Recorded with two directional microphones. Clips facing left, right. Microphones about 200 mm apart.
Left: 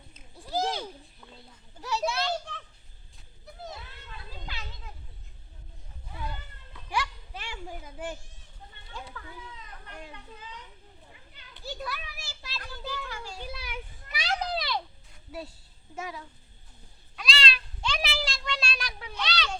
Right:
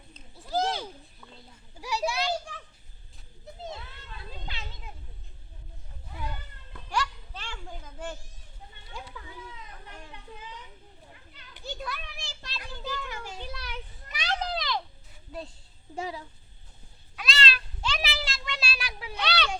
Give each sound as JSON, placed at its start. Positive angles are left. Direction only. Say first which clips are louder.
{"t": 0.3, "sound": "a sound", "louder": "right 1 dB", "side_deg": 0}
{"t": 1.8, "sound": "children playing", "louder": "even", "side_deg": -15}
{"t": 3.4, "sound": "children playing", "louder": "right 2 dB", "side_deg": -25}
{"t": 6.9, "sound": "children playing", "louder": "right 1 dB", "side_deg": 10}
{"t": 8.9, "sound": "children playing", "louder": "even", "side_deg": -10}
{"t": 11.6, "sound": "children playing", "louder": "even", "side_deg": 5}
{"t": 13.1, "sound": "children playing", "louder": "right 1 dB", "side_deg": -20}
{"t": 13.4, "sound": "children playing", "louder": "even", "side_deg": 10}
{"t": 15.3, "sound": "a woman's voice", "louder": "even", "side_deg": 5}
{"t": 16.0, "sound": "a child's voice", "louder": "right 3 dB", "side_deg": -30}
{"t": 17.2, "sound": "cat", "louder": "right 1 dB", "side_deg": 0}
{"t": 19.1, "sound": "a sound", "louder": "right 3 dB", "side_deg": -60}